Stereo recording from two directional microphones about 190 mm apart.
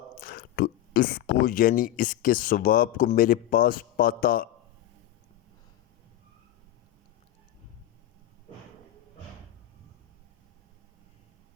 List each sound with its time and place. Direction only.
0.2 s speech: 50° left (ahead or behind)